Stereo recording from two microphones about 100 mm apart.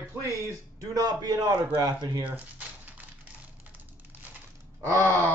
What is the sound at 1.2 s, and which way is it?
Wail, 40° right (ahead or behind).